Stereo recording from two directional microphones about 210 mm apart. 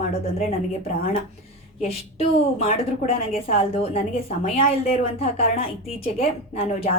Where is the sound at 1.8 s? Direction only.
30° left (ahead or behind).